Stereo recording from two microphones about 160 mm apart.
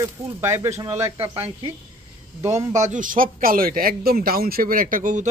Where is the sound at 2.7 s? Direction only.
50° right (ahead or behind).